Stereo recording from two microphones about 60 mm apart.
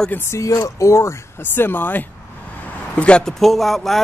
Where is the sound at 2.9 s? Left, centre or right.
Centre.